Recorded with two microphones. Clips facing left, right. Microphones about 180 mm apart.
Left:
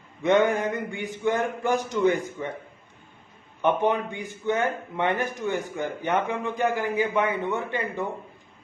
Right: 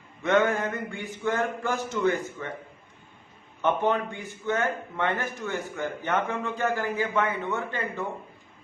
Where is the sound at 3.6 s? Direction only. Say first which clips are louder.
Left 2 dB; 15° left (ahead or behind).